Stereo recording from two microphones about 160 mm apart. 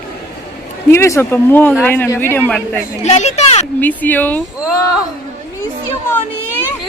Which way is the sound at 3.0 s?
45° left (ahead or behind).